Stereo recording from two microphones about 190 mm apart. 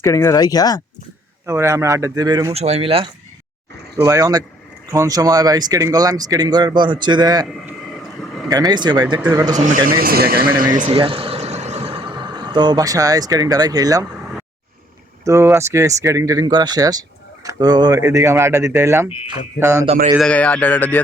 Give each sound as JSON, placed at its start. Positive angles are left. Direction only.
{"t": 0.0, "sound": "speech", "side_deg": 15}
{"t": 1.5, "sound": "speech", "side_deg": -15}
{"t": 2.6, "sound": "speech", "side_deg": -35}
{"t": 4.0, "sound": "speech", "side_deg": -20}
{"t": 7.4, "sound": "a sound", "side_deg": 0}
{"t": 8.4, "sound": "speech", "side_deg": -20}
{"t": 9.6, "sound": "a man's voice", "side_deg": -45}
{"t": 10.8, "sound": "a sound", "side_deg": -30}
{"t": 15.2, "sound": "speech", "side_deg": -15}
{"t": 20.1, "sound": "speech", "side_deg": 5}